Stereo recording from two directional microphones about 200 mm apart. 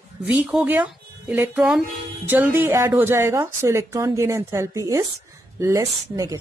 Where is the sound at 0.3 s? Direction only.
5° right (ahead or behind).